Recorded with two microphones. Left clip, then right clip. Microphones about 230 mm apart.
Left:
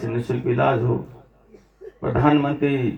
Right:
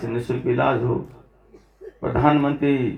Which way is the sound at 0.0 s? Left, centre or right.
Left.